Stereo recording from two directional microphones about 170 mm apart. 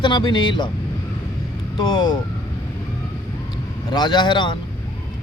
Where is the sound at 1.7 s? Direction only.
25° left (ahead or behind).